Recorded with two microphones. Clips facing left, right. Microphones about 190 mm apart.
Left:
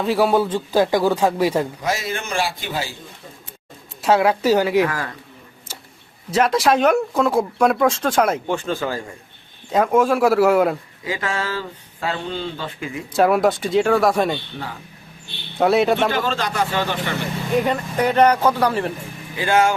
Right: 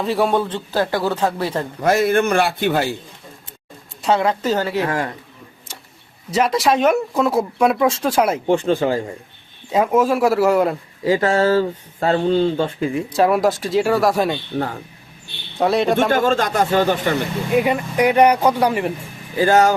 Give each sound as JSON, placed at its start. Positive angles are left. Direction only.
{"t": 0.0, "sound": "speech", "side_deg": 0}
{"t": 1.8, "sound": "a man's voice", "side_deg": -55}
{"t": 4.0, "sound": "speech", "side_deg": 5}
{"t": 4.9, "sound": "a man's voice", "side_deg": -25}
{"t": 6.3, "sound": "speech", "side_deg": 0}
{"t": 8.4, "sound": "speech", "side_deg": -30}
{"t": 9.7, "sound": "speech", "side_deg": -5}
{"t": 11.0, "sound": "speech", "side_deg": -35}
{"t": 13.1, "sound": "speech", "side_deg": 0}
{"t": 14.5, "sound": "speech", "side_deg": -50}
{"t": 15.5, "sound": "speech", "side_deg": 0}
{"t": 16.0, "sound": "speech", "side_deg": -45}
{"t": 17.5, "sound": "speech", "side_deg": -10}
{"t": 19.4, "sound": "speech", "side_deg": -40}